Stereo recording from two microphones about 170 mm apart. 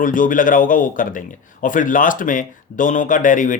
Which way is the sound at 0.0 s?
50° left (ahead or behind).